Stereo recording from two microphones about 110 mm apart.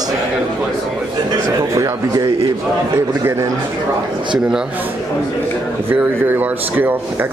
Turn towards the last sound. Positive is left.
turn(degrees=-20)  # may be behind; listen again after turning